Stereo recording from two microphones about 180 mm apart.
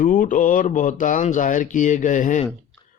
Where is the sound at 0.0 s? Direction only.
50° left (ahead or behind).